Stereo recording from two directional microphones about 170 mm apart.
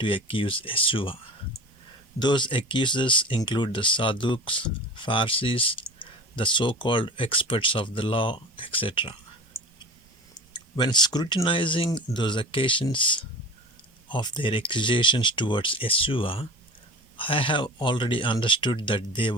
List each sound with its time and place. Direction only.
0.0 s speech: 30° left (ahead or behind)
10.5 s speech: 25° left (ahead or behind)